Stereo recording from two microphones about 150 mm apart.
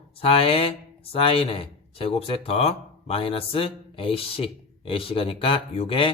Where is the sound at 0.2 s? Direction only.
40° left (ahead or behind).